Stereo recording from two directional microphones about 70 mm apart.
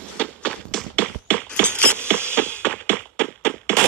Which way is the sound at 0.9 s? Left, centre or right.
Centre.